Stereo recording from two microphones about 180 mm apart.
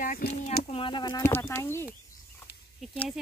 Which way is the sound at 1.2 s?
15° left (ahead or behind).